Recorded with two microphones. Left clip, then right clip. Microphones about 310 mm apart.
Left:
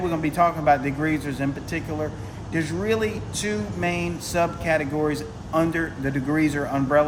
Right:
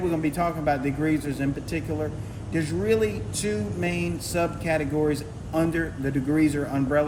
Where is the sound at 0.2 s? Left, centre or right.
Centre.